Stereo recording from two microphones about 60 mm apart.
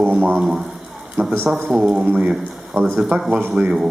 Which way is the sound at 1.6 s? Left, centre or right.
Centre.